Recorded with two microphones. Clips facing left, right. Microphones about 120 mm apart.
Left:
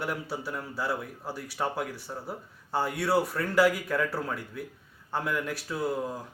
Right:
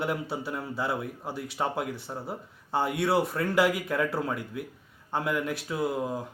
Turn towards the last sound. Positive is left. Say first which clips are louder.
# right 2 dB
turn(degrees=-20)  # may be behind; listen again after turning